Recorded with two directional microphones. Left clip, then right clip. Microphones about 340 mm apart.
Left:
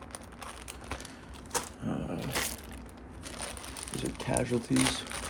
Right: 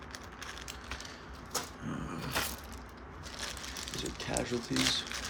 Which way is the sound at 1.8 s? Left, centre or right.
Centre.